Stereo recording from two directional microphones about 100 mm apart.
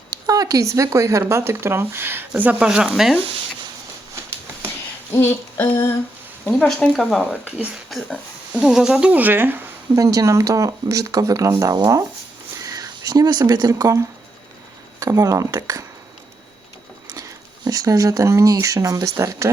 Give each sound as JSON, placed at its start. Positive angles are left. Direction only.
{"t": 0.1, "sound": "speech", "side_deg": -40}
{"t": 5.1, "sound": "female singing", "side_deg": 20}
{"t": 6.5, "sound": "speech", "side_deg": 5}
{"t": 8.1, "sound": "speech", "side_deg": -10}
{"t": 9.9, "sound": "speech", "side_deg": -35}
{"t": 17.2, "sound": "speech", "side_deg": -40}